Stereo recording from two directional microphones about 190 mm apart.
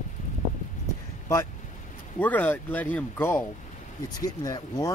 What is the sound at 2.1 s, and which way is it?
Speech, 10° left (ahead or behind).